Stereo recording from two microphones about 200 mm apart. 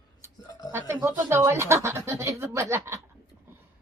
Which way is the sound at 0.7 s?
10° right (ahead or behind).